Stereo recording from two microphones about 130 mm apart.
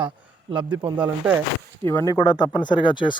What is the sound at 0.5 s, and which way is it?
Speech, 40° right (ahead or behind).